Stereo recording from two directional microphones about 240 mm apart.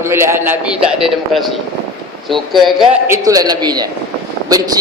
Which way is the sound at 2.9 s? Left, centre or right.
Centre.